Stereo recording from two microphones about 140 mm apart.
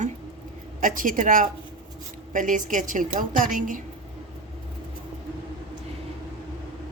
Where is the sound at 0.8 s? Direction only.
75° right (ahead or behind).